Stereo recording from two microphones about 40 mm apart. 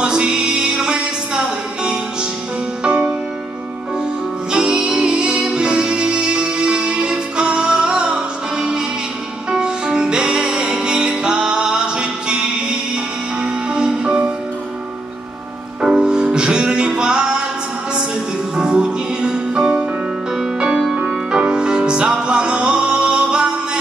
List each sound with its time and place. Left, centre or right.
0.0 s music: right
4.5 s music: right
15.8 s music: right
18.6 s music: right